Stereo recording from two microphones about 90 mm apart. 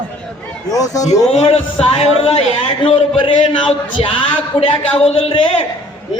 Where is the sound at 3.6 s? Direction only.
75° left (ahead or behind).